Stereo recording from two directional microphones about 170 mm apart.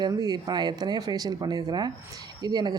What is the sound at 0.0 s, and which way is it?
A woman's voice, 25° right (ahead or behind).